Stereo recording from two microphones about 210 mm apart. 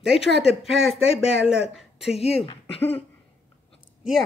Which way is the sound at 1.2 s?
5° right (ahead or behind).